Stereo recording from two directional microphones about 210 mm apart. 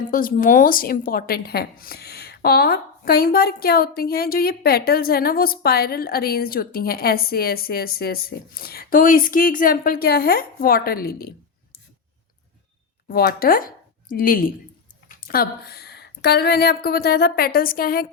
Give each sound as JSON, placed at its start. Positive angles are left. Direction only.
{"t": 0.1, "sound": "a woman's voice", "side_deg": 40}
{"t": 13.1, "sound": "a woman's voice", "side_deg": 45}